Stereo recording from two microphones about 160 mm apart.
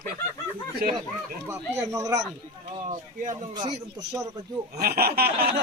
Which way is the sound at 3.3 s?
25° right (ahead or behind).